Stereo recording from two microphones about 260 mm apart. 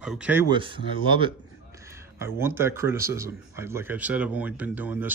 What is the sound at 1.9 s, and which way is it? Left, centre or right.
Speech, centre.